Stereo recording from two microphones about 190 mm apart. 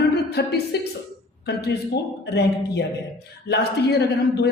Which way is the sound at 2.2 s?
60° left (ahead or behind).